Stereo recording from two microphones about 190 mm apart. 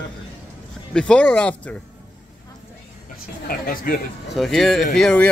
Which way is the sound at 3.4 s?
50° left (ahead or behind).